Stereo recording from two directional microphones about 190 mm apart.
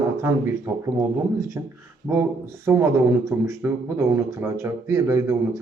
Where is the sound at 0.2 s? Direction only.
15° right (ahead or behind).